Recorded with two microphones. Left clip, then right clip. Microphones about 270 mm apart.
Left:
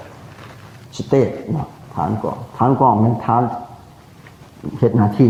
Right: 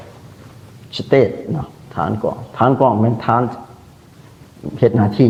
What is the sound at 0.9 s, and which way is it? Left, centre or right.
Speech, right.